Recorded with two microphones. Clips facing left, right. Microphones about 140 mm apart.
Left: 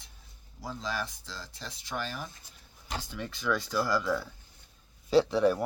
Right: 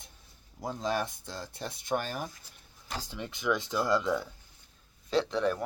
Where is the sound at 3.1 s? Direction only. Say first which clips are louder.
Right 1 dB; 20° right (ahead or behind).